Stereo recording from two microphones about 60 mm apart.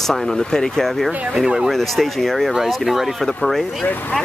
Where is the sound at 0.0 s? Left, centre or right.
Centre.